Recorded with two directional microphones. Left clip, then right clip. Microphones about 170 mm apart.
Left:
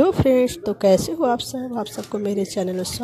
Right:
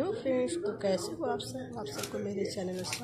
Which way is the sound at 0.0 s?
55° left (ahead or behind).